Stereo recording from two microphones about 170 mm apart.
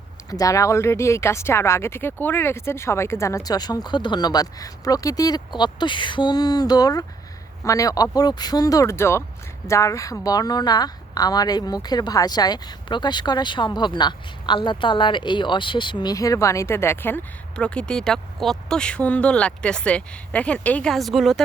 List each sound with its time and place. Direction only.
0.3 s speech: 20° left (ahead or behind); by 21.4 s centre (ahead or behind)